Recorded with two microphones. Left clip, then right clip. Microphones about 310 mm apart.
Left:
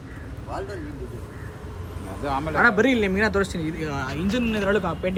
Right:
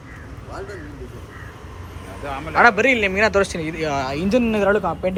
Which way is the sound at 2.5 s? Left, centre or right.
Centre.